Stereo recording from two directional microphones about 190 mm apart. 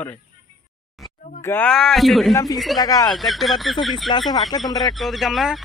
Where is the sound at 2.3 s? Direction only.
20° left (ahead or behind).